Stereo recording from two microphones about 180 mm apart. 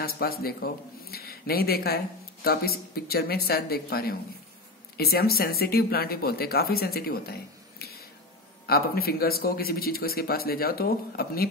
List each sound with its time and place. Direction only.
0.0 s speech: 55° left (ahead or behind)
8.6 s speech: 60° left (ahead or behind)